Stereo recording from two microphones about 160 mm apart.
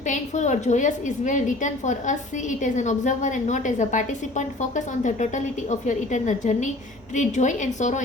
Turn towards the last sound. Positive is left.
turn(degrees=50)  # may be behind; listen again after turning